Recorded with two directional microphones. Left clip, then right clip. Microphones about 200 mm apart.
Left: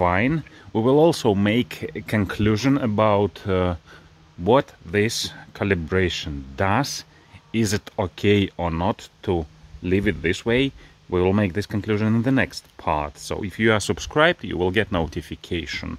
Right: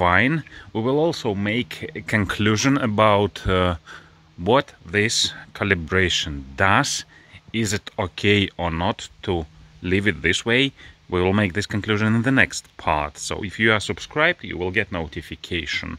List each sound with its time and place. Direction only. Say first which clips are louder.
0.0 s speech: right 3 dB; centre (ahead or behind)
0.7 s speech: left 4 dB; 15° left (ahead or behind)
13.7 s speech: left 2 dB; 20° left (ahead or behind)